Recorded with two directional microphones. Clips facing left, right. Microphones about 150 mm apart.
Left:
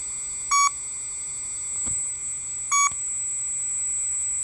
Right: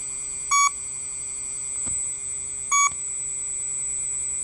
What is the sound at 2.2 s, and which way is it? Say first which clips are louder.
Smoke detector: right 3 dB; 40° right (ahead or behind).